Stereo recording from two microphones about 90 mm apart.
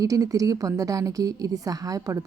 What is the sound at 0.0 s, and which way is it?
A woman's voice, 40° right (ahead or behind).